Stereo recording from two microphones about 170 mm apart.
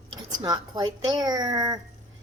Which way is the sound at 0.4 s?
20° right (ahead or behind).